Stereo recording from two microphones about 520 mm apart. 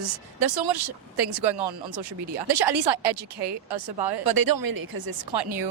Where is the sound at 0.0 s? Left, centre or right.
Right.